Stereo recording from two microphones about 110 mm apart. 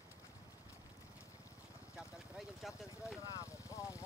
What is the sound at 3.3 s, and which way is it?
Vehicle, 30° left (ahead or behind).